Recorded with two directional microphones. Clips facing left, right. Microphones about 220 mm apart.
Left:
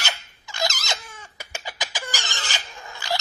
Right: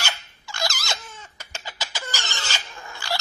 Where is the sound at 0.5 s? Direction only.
20° left (ahead or behind).